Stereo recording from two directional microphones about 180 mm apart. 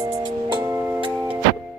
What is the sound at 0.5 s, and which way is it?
Music, 10° right (ahead or behind).